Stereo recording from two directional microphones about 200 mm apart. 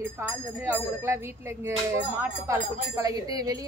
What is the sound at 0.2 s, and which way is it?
A woman's voice, 10° right (ahead or behind).